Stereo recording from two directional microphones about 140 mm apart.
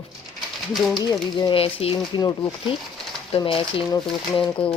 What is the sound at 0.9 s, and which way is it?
Speech, 30° left (ahead or behind).